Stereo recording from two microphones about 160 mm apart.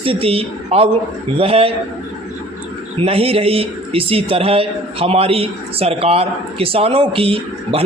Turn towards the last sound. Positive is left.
turn(degrees=-35)  # may be behind; listen again after turning